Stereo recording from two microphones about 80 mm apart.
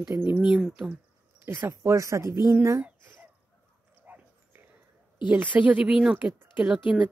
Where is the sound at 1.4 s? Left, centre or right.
Right.